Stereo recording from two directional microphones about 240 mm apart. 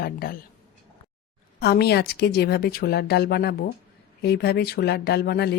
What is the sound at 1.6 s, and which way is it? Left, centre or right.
A woman's voice, left.